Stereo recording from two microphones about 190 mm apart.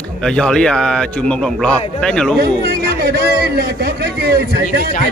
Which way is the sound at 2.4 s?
55° right (ahead or behind).